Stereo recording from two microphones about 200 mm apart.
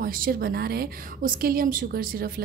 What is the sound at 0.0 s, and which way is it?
A woman's voice, 45° right (ahead or behind).